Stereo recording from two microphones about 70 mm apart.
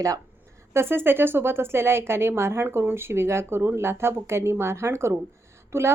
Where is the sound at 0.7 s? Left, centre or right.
Right.